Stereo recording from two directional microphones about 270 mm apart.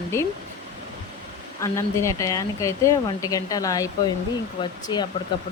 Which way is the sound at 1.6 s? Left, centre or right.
Centre.